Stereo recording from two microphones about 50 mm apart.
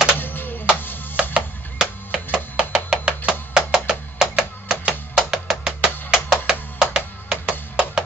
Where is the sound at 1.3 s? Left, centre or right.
Right.